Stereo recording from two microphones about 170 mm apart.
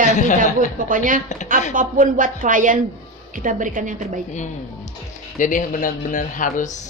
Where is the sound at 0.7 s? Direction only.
55° right (ahead or behind).